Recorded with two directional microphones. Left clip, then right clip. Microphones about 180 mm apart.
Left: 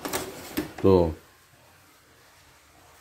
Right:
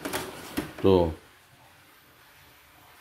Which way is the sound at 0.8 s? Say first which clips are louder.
Left 1 dB; 20° left (ahead or behind).